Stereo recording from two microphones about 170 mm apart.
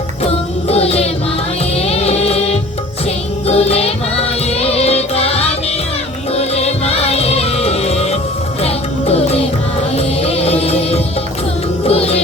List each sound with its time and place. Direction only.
0.3 s music: 35° left (ahead or behind)